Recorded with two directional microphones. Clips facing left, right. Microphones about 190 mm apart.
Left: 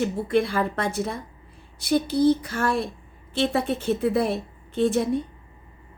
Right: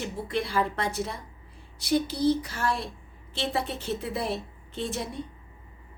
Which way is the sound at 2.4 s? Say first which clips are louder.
Left 5 dB; 50° left (ahead or behind).